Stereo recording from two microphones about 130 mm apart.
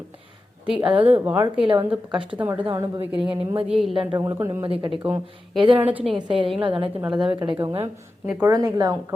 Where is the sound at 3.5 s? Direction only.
50° right (ahead or behind).